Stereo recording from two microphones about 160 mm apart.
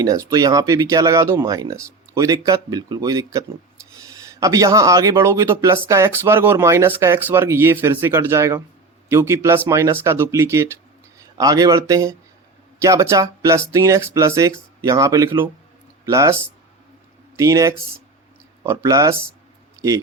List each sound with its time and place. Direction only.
0.0 s a man's voice: 20° right (ahead or behind)